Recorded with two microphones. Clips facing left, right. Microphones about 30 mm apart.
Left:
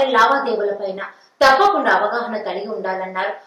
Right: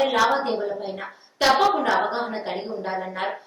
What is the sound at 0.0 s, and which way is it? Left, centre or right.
A woman's voice, centre.